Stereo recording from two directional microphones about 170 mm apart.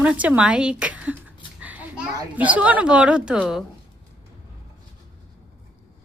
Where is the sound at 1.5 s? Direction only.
10° right (ahead or behind).